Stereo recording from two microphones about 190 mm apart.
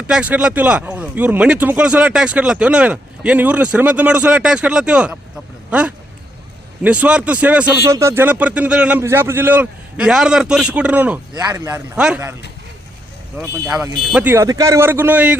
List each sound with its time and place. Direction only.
0.1 s speech: 5° right (ahead or behind)
6.8 s speech: 5° right (ahead or behind)
11.9 s speech: 5° right (ahead or behind)
13.3 s speech: 5° right (ahead or behind)